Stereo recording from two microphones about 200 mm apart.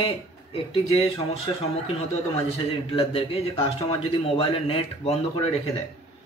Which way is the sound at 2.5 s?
30° left (ahead or behind).